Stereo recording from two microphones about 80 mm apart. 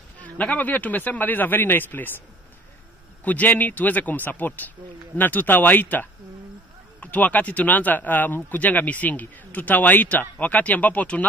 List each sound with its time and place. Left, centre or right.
0.2 s speech: centre
3.3 s speech: left